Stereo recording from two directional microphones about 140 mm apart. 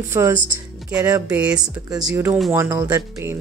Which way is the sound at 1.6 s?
30° right (ahead or behind).